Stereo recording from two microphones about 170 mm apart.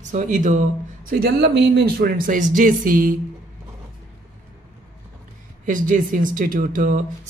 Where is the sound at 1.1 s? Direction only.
70° right (ahead or behind).